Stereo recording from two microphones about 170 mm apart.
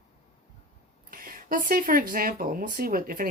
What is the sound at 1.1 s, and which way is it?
Speech, 55° right (ahead or behind).